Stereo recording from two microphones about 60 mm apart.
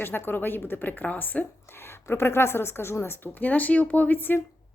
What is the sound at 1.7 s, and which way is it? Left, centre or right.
Speech, left.